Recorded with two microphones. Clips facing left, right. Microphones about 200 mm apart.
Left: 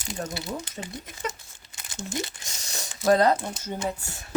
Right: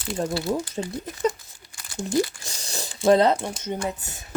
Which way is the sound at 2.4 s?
30° right (ahead or behind).